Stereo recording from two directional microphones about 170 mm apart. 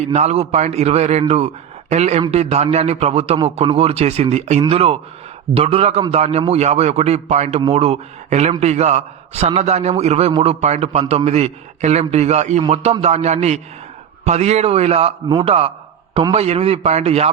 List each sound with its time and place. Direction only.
0.1 s a man's voice: 40° right (ahead or behind)